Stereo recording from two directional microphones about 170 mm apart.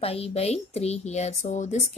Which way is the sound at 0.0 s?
35° left (ahead or behind).